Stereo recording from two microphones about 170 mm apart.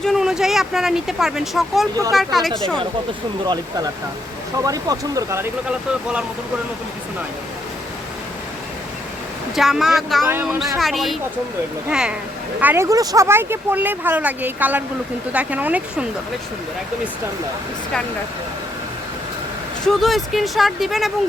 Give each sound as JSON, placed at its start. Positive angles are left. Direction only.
{"t": 0.0, "sound": "speech", "side_deg": 0}
{"t": 3.4, "sound": "speech", "side_deg": -25}
{"t": 5.6, "sound": "speech", "side_deg": -5}
{"t": 9.6, "sound": "speech", "side_deg": 0}
{"t": 10.2, "sound": "speech", "side_deg": -15}
{"t": 10.8, "sound": "speech", "side_deg": 0}
{"t": 19.8, "sound": "speech", "side_deg": 0}